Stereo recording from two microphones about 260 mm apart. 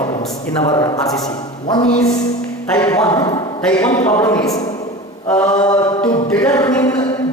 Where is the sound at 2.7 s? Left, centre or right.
Centre.